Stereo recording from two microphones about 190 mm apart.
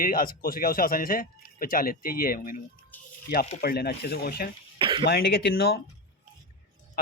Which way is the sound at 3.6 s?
55° left (ahead or behind).